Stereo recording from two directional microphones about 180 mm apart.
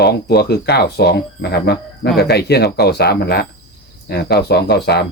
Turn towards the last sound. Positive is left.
turn(degrees=65)  # may be behind; listen again after turning